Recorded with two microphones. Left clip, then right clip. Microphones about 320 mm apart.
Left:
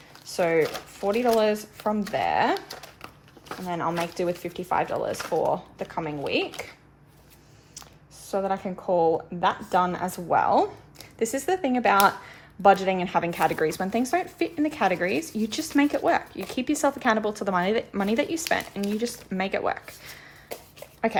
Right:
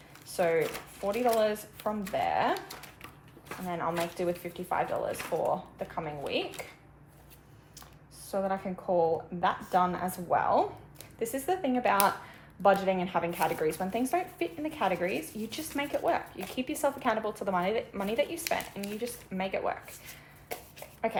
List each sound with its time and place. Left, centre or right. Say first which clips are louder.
0.3 s speech: left 5 dB; left
3.7 s speech: left 4 dB; left
8.3 s speech: left 5 dB; left